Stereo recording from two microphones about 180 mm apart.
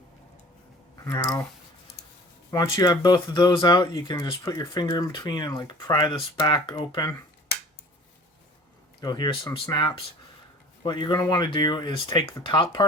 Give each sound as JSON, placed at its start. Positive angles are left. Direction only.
{"t": 1.0, "sound": "speech", "side_deg": 20}
{"t": 2.7, "sound": "speech", "side_deg": 25}
{"t": 9.0, "sound": "speech", "side_deg": 25}